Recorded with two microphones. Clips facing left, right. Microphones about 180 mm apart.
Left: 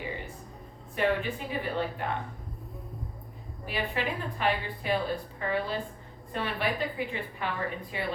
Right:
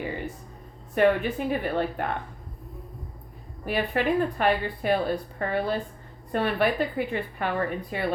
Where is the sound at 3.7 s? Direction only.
50° right (ahead or behind).